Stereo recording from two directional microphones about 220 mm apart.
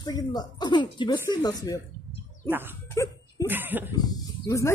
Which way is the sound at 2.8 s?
15° left (ahead or behind).